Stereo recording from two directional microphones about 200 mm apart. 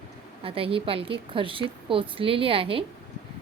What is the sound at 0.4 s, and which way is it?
A woman's voice, 25° right (ahead or behind).